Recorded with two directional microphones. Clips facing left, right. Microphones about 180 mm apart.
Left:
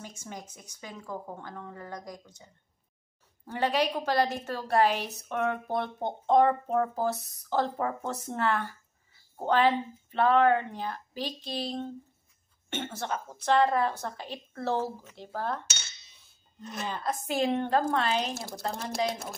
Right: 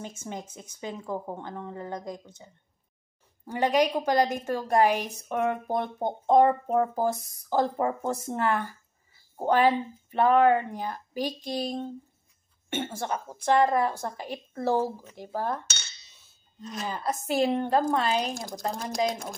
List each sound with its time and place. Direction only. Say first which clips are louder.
0.3 s a woman's voice: right 5 dB; 25° right (ahead or behind)
3.4 s a woman's voice: right 4 dB; 15° right (ahead or behind)
16.8 s a woman's voice: right 2 dB; 10° right (ahead or behind)
18.3 s speech: right 2 dB; 5° left (ahead or behind)